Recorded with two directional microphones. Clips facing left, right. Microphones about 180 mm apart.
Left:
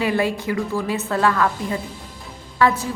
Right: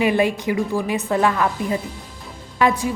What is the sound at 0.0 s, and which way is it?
A woman's voice, 15° right (ahead or behind).